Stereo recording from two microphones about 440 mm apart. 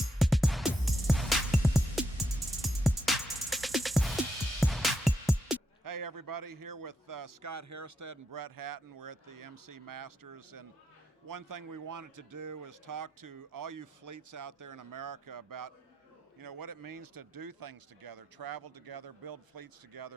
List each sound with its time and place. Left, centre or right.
0.2 s music: centre
5.8 s a man's voice: right